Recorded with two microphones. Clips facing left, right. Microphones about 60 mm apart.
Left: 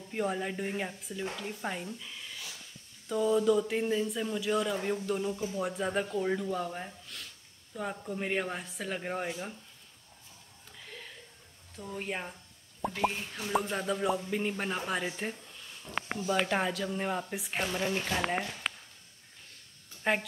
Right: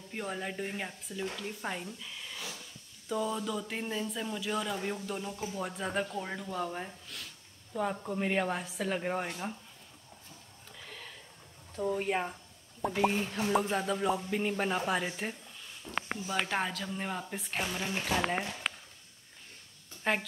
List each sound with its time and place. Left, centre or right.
0.1 s speech: centre
10.9 s a sound: centre
12.0 s speech: centre
13.5 s speech: centre
18.6 s a sound: centre
20.0 s speech: centre